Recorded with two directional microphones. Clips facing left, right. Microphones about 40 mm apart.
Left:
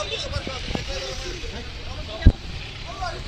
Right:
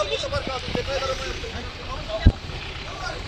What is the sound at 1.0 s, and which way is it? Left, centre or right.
Speech, right.